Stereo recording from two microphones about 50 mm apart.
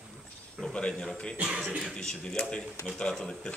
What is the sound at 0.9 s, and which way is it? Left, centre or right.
A man's voice, centre.